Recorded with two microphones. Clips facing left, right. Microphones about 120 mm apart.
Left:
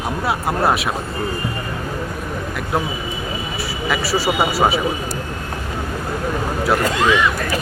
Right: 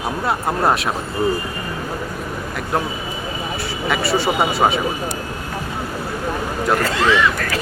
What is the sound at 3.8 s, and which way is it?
Speech, centre (ahead or behind).